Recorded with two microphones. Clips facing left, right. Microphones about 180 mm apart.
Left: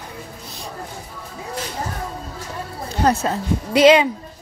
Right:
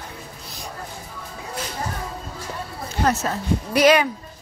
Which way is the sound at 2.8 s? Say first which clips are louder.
Left 3 dB; 30° left (ahead or behind).